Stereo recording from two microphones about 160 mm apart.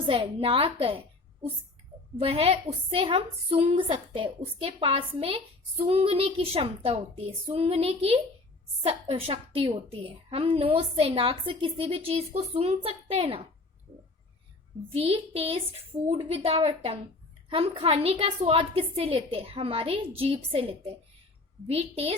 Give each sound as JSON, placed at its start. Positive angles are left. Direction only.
{"t": 0.1, "sound": "a woman's voice", "side_deg": -35}
{"t": 14.9, "sound": "a woman's voice", "side_deg": -35}